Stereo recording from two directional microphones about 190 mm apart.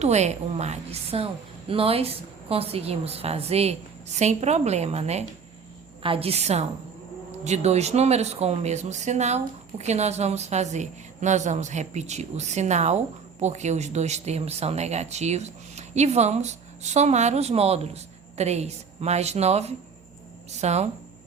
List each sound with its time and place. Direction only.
0.0 s speech: 35° right (ahead or behind)